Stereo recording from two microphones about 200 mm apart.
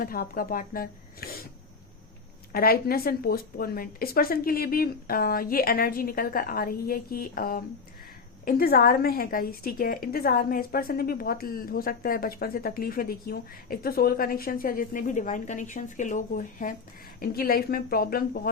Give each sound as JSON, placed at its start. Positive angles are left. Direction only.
{"t": 0.0, "sound": "a woman's voice", "side_deg": 45}
{"t": 2.5, "sound": "a woman's voice", "side_deg": 50}